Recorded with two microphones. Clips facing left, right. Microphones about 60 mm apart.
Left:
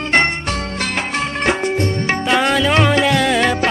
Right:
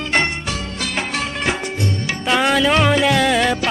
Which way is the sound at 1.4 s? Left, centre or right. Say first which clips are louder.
Left 7 dB; left.